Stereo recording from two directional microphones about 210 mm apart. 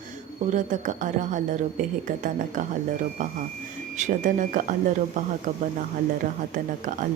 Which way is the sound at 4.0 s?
35° right (ahead or behind).